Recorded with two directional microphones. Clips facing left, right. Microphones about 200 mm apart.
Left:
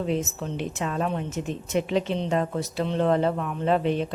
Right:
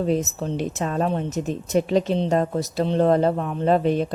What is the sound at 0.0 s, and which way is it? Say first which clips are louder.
A woman's voice: right 4 dB; 40° right (ahead or behind).